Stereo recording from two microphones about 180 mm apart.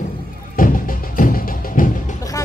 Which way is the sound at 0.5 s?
50° left (ahead or behind).